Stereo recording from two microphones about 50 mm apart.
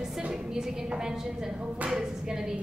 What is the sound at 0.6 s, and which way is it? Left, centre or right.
A woman's voice, centre.